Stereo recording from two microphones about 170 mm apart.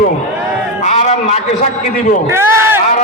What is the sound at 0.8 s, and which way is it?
Speech, 40° left (ahead or behind).